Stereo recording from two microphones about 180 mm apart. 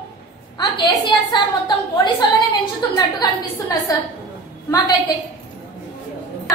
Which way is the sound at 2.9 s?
20° left (ahead or behind).